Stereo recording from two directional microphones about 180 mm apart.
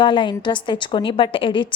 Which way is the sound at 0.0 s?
25° left (ahead or behind).